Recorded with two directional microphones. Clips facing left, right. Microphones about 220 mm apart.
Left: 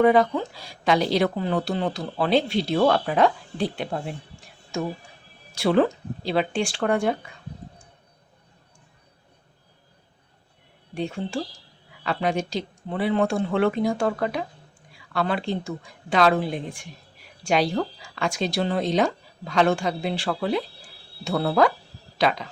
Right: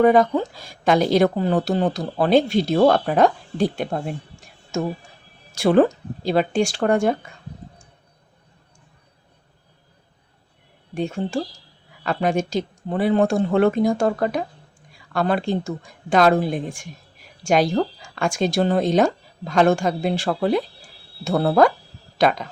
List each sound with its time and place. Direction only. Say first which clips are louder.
0.0 s speech: right 3 dB; 45° right (ahead or behind)
10.9 s speech: right 4 dB; 45° right (ahead or behind)